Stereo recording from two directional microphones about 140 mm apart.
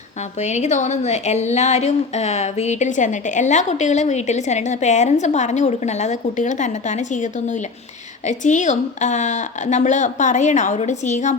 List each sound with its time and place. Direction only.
0.3 s speech: 55° left (ahead or behind)